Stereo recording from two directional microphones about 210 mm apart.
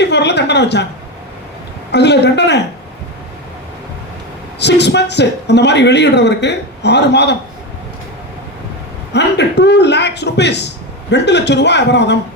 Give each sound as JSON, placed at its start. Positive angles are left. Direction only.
{"t": 0.0, "sound": "a sound", "side_deg": 55}
{"t": 1.9, "sound": "a man's voice", "side_deg": 55}
{"t": 4.6, "sound": "a man's voice", "side_deg": 55}
{"t": 9.1, "sound": "a man's voice", "side_deg": 55}